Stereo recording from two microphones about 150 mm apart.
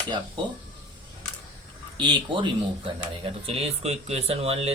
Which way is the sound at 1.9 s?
30° right (ahead or behind).